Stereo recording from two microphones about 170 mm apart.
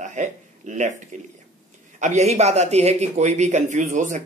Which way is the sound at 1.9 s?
45° right (ahead or behind).